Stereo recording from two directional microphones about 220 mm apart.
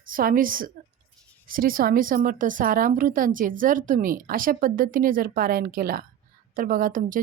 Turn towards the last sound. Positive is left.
turn(degrees=-40)  # may be behind; listen again after turning